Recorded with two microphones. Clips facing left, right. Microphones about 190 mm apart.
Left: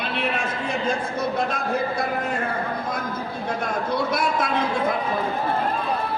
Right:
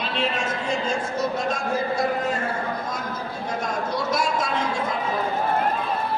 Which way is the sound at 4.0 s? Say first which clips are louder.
Even; 55° left (ahead or behind).